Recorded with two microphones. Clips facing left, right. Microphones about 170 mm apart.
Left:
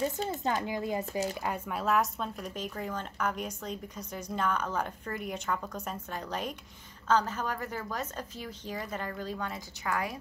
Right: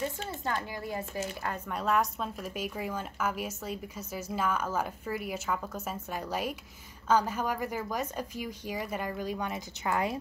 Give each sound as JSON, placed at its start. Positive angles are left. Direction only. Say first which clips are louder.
{"t": 0.3, "sound": "a child's voice", "louder": "left 3 dB", "side_deg": 20}
{"t": 1.7, "sound": "a woman's voice", "louder": "even", "side_deg": 0}